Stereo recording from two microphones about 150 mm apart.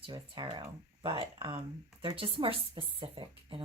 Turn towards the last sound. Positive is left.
turn(degrees=-35)  # may be behind; listen again after turning